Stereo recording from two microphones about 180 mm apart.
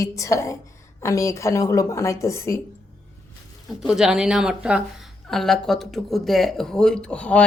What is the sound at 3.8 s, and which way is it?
Speech, 5° right (ahead or behind).